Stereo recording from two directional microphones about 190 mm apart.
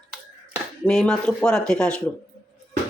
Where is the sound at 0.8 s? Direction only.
5° left (ahead or behind).